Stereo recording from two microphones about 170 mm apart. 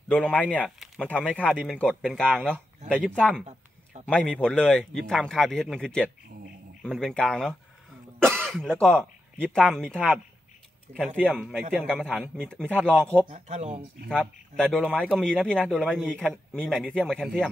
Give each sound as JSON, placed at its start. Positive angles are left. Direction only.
{"t": 0.1, "sound": "speech", "side_deg": 10}
{"t": 1.4, "sound": "a man's voice", "side_deg": -5}
{"t": 8.8, "sound": "speech", "side_deg": -10}
{"t": 9.5, "sound": "a man's voice", "side_deg": 5}
{"t": 11.1, "sound": "a man's voice", "side_deg": -10}
{"t": 11.8, "sound": "a man's voice", "side_deg": 5}
{"t": 13.3, "sound": "speech", "side_deg": -40}
{"t": 14.0, "sound": "a man's voice", "side_deg": 5}